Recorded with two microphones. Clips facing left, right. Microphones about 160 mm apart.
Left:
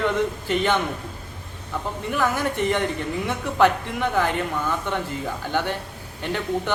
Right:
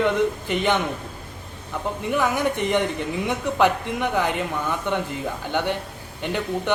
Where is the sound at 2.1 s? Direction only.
15° right (ahead or behind).